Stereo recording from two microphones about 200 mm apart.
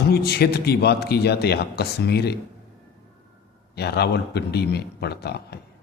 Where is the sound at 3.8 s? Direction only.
55° left (ahead or behind).